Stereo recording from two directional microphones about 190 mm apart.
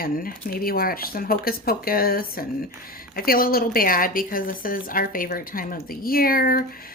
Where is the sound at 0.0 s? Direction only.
50° left (ahead or behind).